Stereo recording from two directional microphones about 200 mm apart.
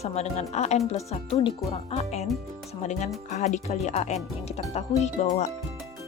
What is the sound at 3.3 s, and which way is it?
Speech, 35° left (ahead or behind).